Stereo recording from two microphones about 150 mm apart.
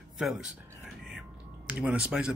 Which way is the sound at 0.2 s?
5° right (ahead or behind).